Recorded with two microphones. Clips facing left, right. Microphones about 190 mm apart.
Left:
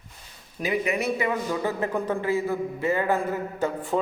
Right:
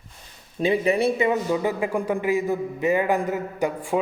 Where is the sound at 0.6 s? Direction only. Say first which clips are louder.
Right 5 dB; 30° right (ahead or behind); by 4.0 s 10° right (ahead or behind).